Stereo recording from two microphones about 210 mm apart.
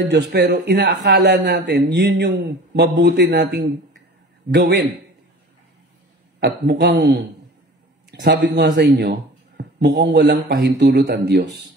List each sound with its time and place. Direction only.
0.0 s speech: 55° right (ahead or behind)
6.4 s speech: 55° right (ahead or behind)